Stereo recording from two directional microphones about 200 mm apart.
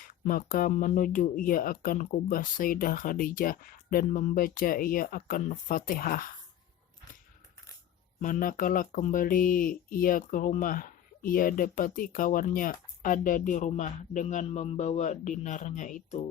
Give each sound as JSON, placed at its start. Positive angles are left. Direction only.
{"t": 0.3, "sound": "speech", "side_deg": 45}
{"t": 8.2, "sound": "speech", "side_deg": 40}